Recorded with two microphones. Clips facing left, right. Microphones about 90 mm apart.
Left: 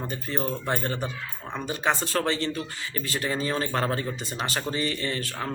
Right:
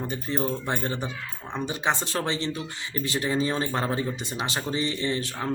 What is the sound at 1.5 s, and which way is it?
A man's voice, 20° right (ahead or behind).